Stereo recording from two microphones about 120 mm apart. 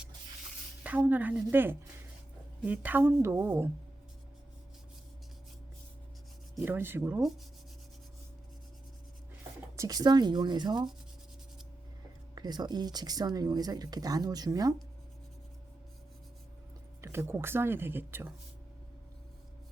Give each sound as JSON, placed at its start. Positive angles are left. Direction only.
{"t": 0.9, "sound": "a woman's voice", "side_deg": -15}
{"t": 6.7, "sound": "a woman's voice", "side_deg": -20}
{"t": 9.7, "sound": "speech", "side_deg": -30}
{"t": 12.3, "sound": "speech", "side_deg": -35}
{"t": 17.0, "sound": "speech", "side_deg": -20}